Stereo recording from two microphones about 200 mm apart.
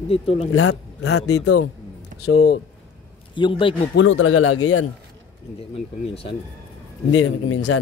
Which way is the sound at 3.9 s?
75° left (ahead or behind).